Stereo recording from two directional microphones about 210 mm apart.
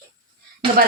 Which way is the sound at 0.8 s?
45° right (ahead or behind).